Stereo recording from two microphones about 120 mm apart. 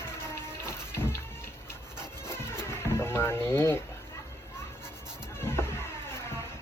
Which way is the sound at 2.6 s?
20° left (ahead or behind).